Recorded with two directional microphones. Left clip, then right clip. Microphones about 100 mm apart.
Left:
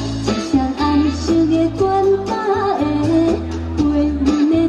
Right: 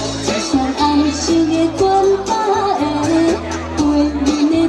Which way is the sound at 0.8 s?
40° right (ahead or behind).